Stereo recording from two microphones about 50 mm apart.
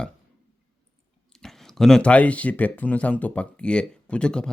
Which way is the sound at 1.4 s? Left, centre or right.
Centre.